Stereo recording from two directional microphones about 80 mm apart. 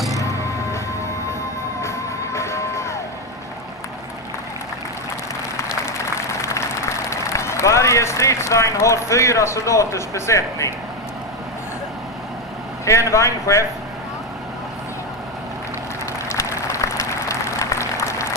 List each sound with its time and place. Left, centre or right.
1.8 s music: left
6.1 s applause: left
7.1 s a man's voice: left
12.8 s a man's voice: left
16.3 s applause: left